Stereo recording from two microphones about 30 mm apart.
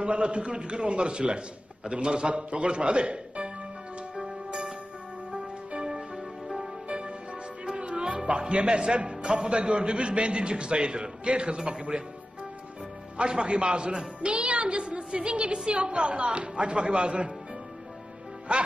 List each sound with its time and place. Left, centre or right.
0.0 s a man's voice: right
4.1 s music: right
5.8 s music: right
8.3 s a man's voice: right
13.2 s a man's voice: right
18.5 s a man's voice: right